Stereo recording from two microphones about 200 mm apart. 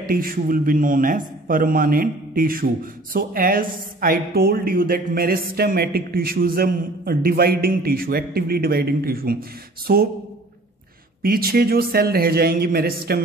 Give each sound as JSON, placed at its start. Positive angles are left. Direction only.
{"t": 0.0, "sound": "a man's voice", "side_deg": -45}
{"t": 11.2, "sound": "a man's voice", "side_deg": -50}